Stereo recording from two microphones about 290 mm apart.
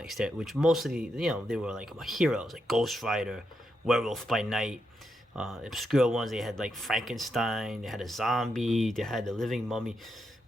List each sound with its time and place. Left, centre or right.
0.0 s speech: centre